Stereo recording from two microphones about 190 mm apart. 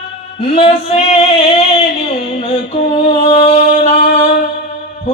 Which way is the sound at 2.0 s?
30° left (ahead or behind).